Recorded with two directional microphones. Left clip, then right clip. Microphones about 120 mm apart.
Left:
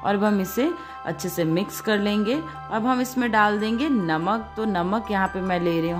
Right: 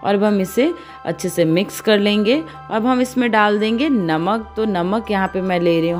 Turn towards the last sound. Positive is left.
turn(degrees=-45)  # may be behind; listen again after turning